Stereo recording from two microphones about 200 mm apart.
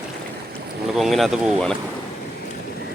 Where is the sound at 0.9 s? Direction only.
Centre (ahead or behind).